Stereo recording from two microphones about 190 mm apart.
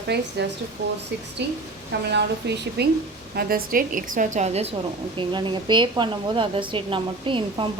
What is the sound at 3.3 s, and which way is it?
A woman's voice, 50° right (ahead or behind).